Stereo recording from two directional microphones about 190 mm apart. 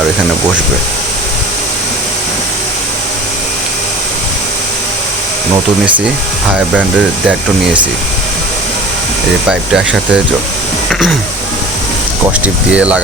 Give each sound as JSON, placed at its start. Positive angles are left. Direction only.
{"t": 9.5, "sound": "speech", "side_deg": -5}
{"t": 12.7, "sound": "speech", "side_deg": -5}